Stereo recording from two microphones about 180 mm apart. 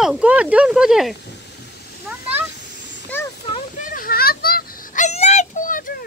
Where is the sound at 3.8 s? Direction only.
50° left (ahead or behind).